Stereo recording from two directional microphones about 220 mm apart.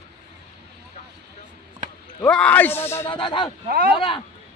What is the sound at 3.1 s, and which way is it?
Speech, 20° left (ahead or behind).